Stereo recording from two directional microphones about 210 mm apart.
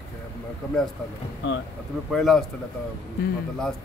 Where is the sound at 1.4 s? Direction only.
55° left (ahead or behind).